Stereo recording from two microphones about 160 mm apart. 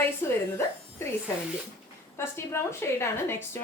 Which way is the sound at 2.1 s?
15° left (ahead or behind).